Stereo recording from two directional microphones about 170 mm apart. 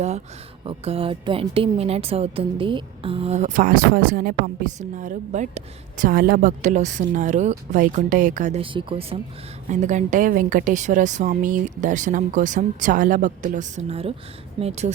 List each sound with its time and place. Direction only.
0.6 s a woman's voice: 30° right (ahead or behind); by 4.7 s 60° right (ahead or behind)
4.8 s a woman's voice: 45° right (ahead or behind)
8.6 s a woman's voice: 30° right (ahead or behind)
9.6 s a woman's voice: 45° right (ahead or behind)